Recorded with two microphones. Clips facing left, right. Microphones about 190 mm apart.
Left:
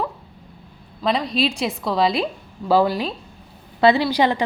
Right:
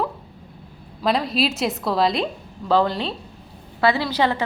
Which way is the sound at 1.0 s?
5° right (ahead or behind).